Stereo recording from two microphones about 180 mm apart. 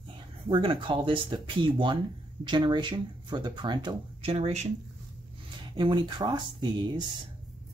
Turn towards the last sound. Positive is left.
turn(degrees=-25)  # may be behind; listen again after turning